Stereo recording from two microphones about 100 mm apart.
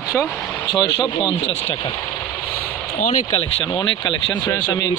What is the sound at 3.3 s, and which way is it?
Speech, 55° left (ahead or behind).